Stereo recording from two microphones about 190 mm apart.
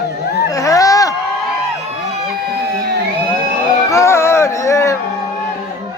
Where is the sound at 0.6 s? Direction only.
15° left (ahead or behind).